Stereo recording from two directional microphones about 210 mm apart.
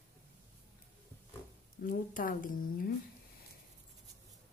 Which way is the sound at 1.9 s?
40° left (ahead or behind).